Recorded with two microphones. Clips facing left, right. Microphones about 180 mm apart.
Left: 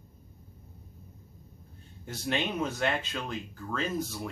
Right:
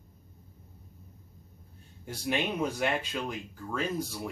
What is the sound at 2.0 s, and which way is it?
Speech, 10° right (ahead or behind).